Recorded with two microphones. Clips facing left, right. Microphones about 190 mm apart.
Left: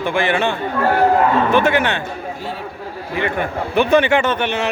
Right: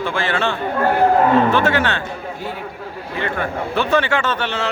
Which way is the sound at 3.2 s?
15° left (ahead or behind).